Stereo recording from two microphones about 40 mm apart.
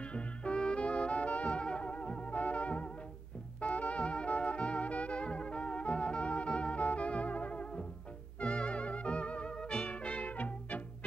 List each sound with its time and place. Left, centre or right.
0.1 s music: left
3.6 s brass instrument: left
8.4 s music: left